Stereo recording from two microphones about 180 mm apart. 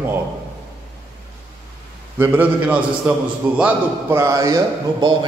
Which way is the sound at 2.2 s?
10° right (ahead or behind).